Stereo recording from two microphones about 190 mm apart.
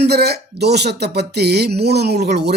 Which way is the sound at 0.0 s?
60° right (ahead or behind).